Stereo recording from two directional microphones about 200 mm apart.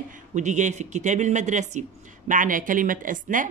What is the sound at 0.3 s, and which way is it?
A woman's voice, 35° right (ahead or behind).